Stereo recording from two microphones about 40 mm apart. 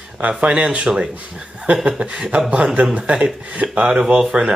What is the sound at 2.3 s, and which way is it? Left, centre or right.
Speech, right.